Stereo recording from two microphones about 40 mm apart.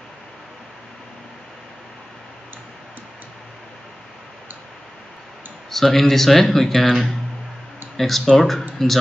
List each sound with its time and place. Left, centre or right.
5.7 s speech: centre